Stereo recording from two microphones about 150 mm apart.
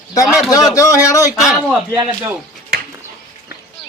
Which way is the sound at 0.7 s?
20° left (ahead or behind).